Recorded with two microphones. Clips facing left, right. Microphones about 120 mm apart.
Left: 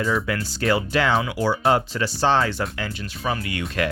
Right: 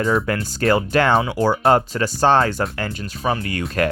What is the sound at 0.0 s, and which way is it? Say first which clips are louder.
Speech: right 4 dB; 45° right (ahead or behind).